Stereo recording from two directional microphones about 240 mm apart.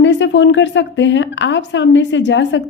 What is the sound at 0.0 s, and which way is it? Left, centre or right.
A woman's voice, left.